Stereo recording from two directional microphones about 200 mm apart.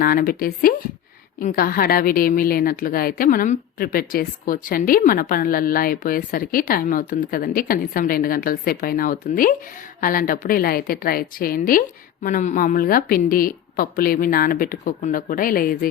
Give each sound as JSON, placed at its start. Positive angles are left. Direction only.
{"t": 0.0, "sound": "a woman's voice", "side_deg": 45}